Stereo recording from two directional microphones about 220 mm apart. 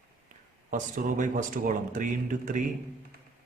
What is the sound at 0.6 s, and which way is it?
Speech, 35° right (ahead or behind).